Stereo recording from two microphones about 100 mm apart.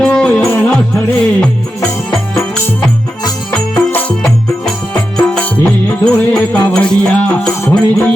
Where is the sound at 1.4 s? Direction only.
10° left (ahead or behind).